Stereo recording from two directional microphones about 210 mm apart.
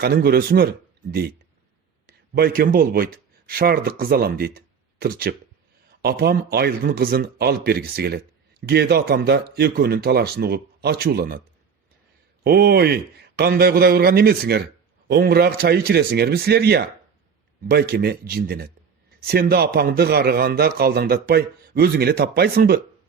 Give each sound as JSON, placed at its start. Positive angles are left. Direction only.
{"t": 0.0, "sound": "a man's voice", "side_deg": -50}
{"t": 2.0, "sound": "a man's voice", "side_deg": -45}
{"t": 12.4, "sound": "a man's voice", "side_deg": -50}